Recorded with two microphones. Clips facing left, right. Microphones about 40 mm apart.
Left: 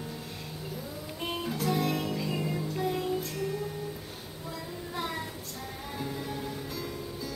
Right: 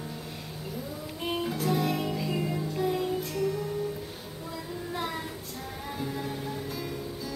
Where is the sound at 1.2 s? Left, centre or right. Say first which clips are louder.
Right 2 dB; centre.